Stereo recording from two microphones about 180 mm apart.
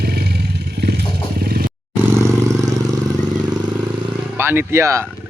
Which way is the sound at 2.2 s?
15° right (ahead or behind).